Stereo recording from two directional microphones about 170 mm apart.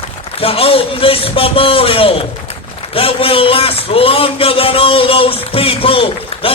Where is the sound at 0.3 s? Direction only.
35° left (ahead or behind).